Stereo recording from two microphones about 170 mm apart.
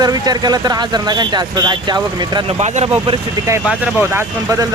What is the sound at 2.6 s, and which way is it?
Speech, 40° right (ahead or behind).